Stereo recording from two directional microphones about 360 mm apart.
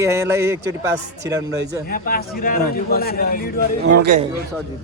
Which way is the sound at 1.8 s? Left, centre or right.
Left.